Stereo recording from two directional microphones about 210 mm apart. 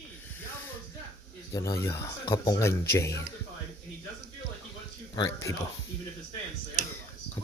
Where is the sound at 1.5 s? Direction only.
15° left (ahead or behind).